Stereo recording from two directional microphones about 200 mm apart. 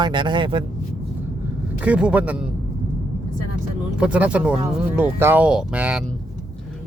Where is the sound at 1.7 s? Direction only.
5° right (ahead or behind).